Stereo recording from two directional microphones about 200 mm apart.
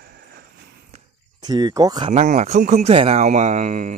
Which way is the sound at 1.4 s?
20° right (ahead or behind).